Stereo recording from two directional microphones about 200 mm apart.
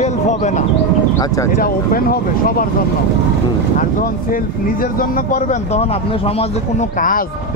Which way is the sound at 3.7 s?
45° left (ahead or behind).